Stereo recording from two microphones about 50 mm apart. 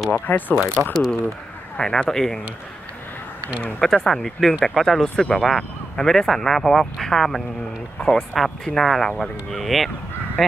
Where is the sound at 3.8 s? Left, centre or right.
Centre.